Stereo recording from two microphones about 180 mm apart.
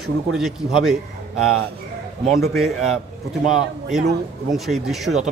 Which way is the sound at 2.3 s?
Centre (ahead or behind).